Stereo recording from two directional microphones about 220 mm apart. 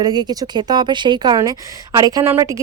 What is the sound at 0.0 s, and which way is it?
A woman's voice, 20° right (ahead or behind).